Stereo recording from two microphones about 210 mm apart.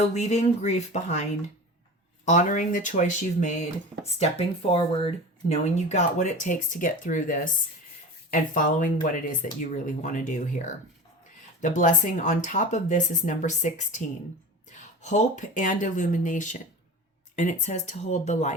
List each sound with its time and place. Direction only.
0.0 s speech: 35° left (ahead or behind)
2.2 s speech: 35° left (ahead or behind)
15.0 s speech: 35° left (ahead or behind)